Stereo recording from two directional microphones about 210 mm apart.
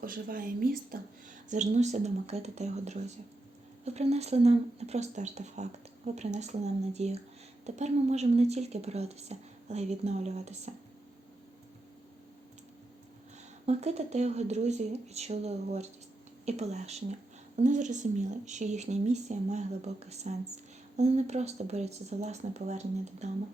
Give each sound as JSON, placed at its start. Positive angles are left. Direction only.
{"t": 0.0, "sound": "speech", "side_deg": -45}
{"t": 13.7, "sound": "speech", "side_deg": -30}